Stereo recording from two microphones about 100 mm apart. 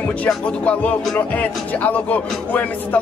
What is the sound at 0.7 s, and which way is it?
Speech, 15° left (ahead or behind).